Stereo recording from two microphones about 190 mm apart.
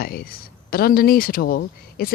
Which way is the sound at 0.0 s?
50° left (ahead or behind).